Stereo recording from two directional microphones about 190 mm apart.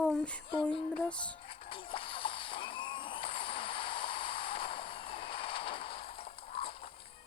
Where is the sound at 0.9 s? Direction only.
5° left (ahead or behind).